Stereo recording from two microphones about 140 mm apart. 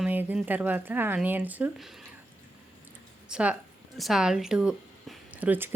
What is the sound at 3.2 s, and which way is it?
Speech, 5° right (ahead or behind).